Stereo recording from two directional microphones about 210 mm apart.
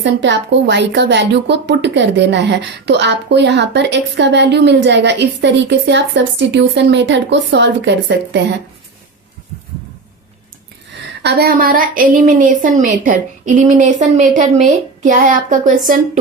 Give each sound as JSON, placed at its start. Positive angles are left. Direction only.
{"t": 0.0, "sound": "a woman's voice", "side_deg": -55}
{"t": 11.2, "sound": "a woman's voice", "side_deg": -50}